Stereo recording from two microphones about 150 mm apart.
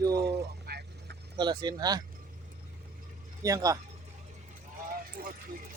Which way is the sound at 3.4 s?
20° right (ahead or behind).